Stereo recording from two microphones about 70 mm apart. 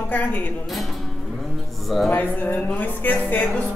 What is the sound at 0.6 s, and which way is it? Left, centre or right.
Speech, centre.